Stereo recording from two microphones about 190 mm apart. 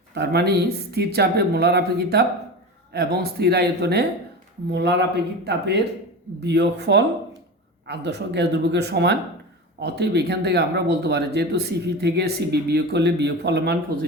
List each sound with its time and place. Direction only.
0.1 s speech: 60° right (ahead or behind)